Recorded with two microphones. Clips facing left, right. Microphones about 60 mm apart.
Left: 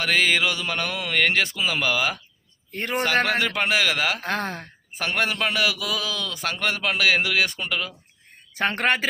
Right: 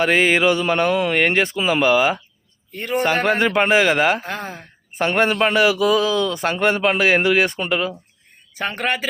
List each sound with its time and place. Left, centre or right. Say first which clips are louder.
0.0 s a man's voice: right 6 dB; right
2.7 s speech: right 4 dB; left
3.2 s a man's voice: right 6 dB; right
4.2 s speech: left 2 dB; left
4.9 s a man's voice: right 7 dB; right
8.5 s speech: left 1 dB; left